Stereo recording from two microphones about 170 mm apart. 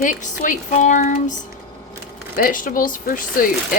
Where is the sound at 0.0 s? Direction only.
50° left (ahead or behind).